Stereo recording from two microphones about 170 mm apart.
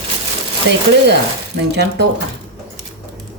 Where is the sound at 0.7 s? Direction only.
90° right.